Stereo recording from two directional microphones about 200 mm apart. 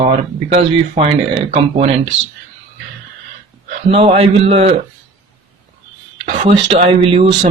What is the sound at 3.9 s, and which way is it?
Speech, 30° right (ahead or behind).